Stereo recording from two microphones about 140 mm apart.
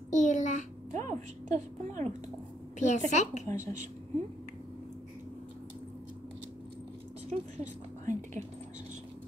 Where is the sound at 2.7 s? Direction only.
60° left (ahead or behind).